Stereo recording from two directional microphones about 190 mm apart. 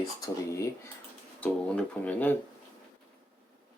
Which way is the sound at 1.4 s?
5° left (ahead or behind).